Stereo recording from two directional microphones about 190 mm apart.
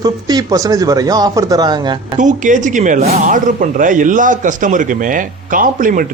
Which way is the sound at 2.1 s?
40° right (ahead or behind).